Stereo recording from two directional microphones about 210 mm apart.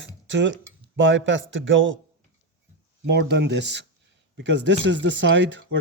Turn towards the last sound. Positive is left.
turn(degrees=-60)  # may be behind; listen again after turning